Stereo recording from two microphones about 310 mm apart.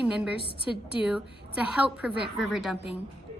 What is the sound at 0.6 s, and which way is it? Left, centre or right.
Speech, centre.